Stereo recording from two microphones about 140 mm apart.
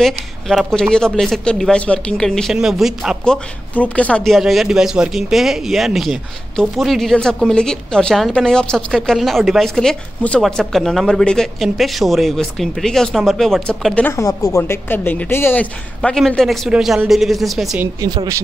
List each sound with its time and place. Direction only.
0.0 s speech: centre (ahead or behind)
3.7 s speech: 10° left (ahead or behind)
14.1 s a woman's voice: 25° left (ahead or behind); by 17.7 s centre (ahead or behind)
18.0 s speech: 30° right (ahead or behind)